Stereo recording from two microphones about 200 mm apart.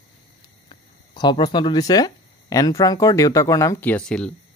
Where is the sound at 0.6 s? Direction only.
25° left (ahead or behind); by 4.3 s 5° left (ahead or behind).